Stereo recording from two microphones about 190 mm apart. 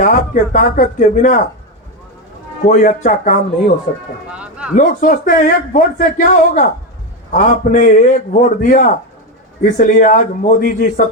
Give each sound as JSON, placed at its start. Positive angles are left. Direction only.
{"t": 0.0, "sound": "speech", "side_deg": 45}
{"t": 2.6, "sound": "speech", "side_deg": 40}
{"t": 4.3, "sound": "a sound", "side_deg": -5}
{"t": 4.7, "sound": "speech", "side_deg": 45}